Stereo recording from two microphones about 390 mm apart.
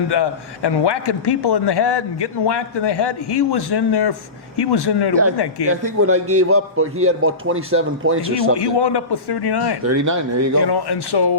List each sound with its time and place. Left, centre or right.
0.1 s a man's voice: left
5.6 s a man's voice: right
8.5 s a man's voice: left
9.8 s a man's voice: right
10.6 s a man's voice: left